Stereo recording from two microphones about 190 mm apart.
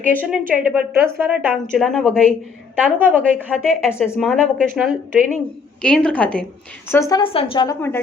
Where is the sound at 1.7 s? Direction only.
Centre (ahead or behind).